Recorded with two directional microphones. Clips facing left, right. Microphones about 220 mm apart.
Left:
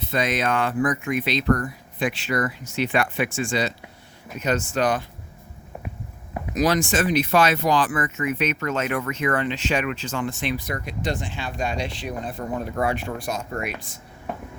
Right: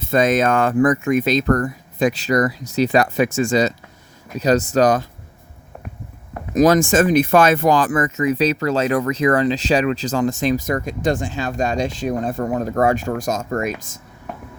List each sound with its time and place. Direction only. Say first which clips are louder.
0.0 s speech: right 8 dB; 45° right (ahead or behind)
6.5 s speech: right 8 dB; 45° right (ahead or behind)